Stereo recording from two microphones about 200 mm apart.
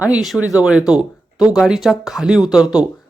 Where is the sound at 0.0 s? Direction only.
5° right (ahead or behind).